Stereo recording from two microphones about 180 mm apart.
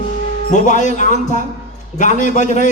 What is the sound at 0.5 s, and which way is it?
A man's voice, 45° left (ahead or behind).